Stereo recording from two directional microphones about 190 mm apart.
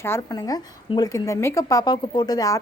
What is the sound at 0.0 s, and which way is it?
A woman's voice, 15° left (ahead or behind).